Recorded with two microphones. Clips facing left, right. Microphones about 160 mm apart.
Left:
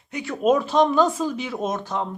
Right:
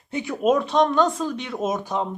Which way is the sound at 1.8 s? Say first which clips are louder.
Right 1 dB; 15° right (ahead or behind).